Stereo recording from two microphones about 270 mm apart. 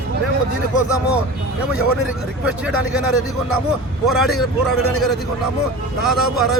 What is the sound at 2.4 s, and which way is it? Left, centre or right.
Speech, centre.